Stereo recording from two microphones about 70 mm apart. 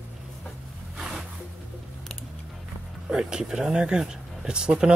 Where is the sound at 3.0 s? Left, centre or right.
Centre.